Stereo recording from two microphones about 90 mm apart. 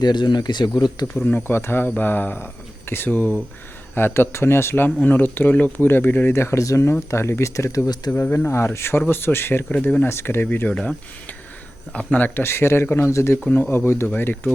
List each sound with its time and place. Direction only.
0.0 s speech: 55° left (ahead or behind)
1.5 s speech: 25° left (ahead or behind)
8.1 s speech: 25° left (ahead or behind)